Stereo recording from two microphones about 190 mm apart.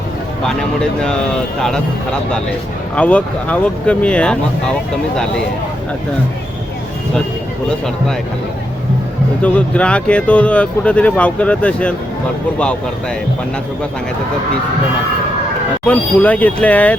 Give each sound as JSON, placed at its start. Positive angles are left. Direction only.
{"t": 0.4, "sound": "speech", "side_deg": 5}
{"t": 2.9, "sound": "speech", "side_deg": 5}
{"t": 9.4, "sound": "speech", "side_deg": 5}
{"t": 15.9, "sound": "speech", "side_deg": 10}